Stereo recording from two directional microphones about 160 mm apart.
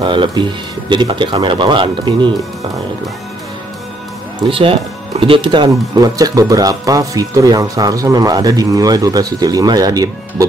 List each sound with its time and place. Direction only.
0.0 s speech: 30° right (ahead or behind)
4.5 s speech: 35° right (ahead or behind)